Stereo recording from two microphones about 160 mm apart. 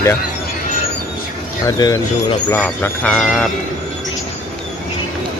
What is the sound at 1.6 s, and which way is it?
Speech, 20° left (ahead or behind).